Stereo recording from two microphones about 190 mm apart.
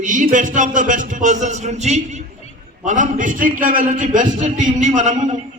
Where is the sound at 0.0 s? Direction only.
45° right (ahead or behind).